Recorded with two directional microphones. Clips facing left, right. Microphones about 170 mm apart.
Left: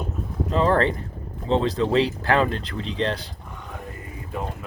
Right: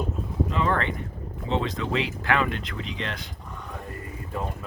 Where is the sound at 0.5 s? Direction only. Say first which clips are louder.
Left 8 dB; 35° left (ahead or behind).